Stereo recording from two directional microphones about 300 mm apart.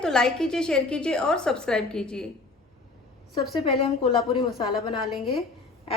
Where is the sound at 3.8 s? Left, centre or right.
Centre.